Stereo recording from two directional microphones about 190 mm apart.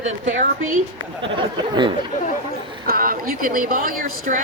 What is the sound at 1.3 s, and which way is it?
Speech, 25° right (ahead or behind).